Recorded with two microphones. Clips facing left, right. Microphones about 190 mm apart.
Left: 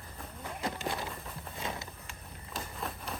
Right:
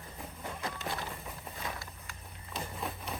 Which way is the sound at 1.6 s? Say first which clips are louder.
Left 3 dB; 25° left (ahead or behind).